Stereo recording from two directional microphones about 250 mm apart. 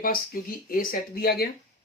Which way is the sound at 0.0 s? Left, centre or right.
Left.